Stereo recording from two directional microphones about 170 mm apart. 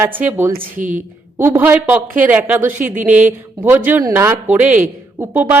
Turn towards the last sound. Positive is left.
turn(degrees=-10)  # may be behind; listen again after turning